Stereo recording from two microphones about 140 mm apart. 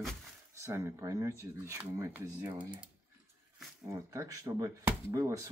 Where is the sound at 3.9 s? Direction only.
20° right (ahead or behind).